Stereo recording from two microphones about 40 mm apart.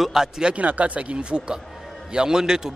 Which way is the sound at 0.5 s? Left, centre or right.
Right.